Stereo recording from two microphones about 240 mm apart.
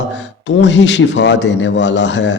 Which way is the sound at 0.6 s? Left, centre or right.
Left.